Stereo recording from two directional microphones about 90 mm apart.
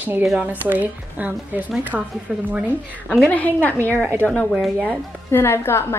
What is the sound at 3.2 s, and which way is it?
A woman's voice, 20° left (ahead or behind).